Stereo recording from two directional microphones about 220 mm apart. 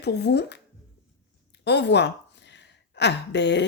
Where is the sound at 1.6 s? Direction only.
50° left (ahead or behind).